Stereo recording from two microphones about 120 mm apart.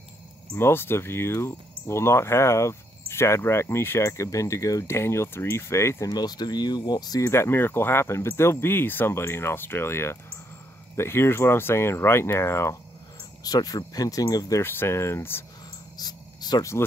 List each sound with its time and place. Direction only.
0.6 s speech: 20° left (ahead or behind)
7.2 s speech: 20° left (ahead or behind)
13.4 s speech: 30° left (ahead or behind)
16.0 s a sound: 35° left (ahead or behind)